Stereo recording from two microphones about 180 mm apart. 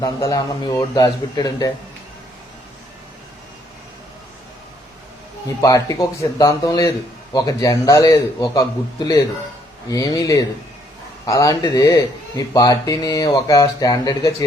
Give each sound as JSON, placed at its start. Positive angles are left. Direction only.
{"t": 0.0, "sound": "speech", "side_deg": 20}
{"t": 5.5, "sound": "speech", "side_deg": 20}
{"t": 9.9, "sound": "speech", "side_deg": 20}